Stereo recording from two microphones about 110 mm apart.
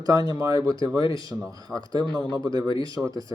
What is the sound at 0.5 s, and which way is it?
Speech, 35° right (ahead or behind).